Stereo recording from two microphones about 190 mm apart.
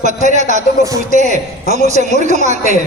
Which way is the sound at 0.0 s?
40° right (ahead or behind).